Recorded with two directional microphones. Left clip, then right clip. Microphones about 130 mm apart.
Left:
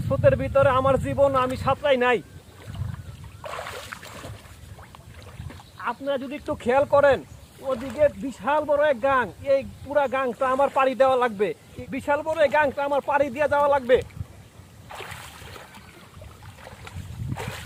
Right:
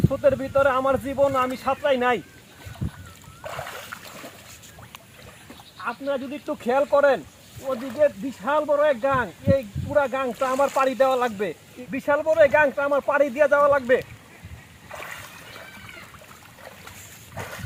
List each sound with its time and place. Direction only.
0.1 s speech: 35° left (ahead or behind)
3.4 s a sound: 35° left (ahead or behind)
5.8 s speech: 20° left (ahead or behind); by 11.5 s 40° left (ahead or behind)
11.9 s speech: 65° left (ahead or behind); by 13.5 s 90° left
13.8 s speech: 70° left (ahead or behind)